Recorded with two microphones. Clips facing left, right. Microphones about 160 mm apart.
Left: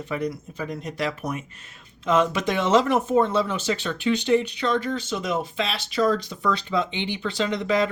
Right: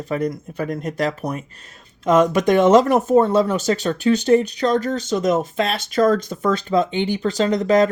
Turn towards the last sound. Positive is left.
turn(degrees=-45)  # may be behind; listen again after turning